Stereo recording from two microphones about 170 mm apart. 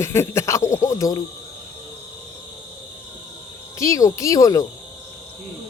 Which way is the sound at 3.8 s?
20° left (ahead or behind).